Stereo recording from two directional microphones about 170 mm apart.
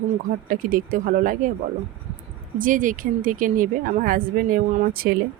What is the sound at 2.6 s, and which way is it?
A woman's voice, 50° right (ahead or behind).